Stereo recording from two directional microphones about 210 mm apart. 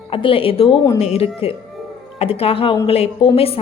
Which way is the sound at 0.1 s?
25° left (ahead or behind).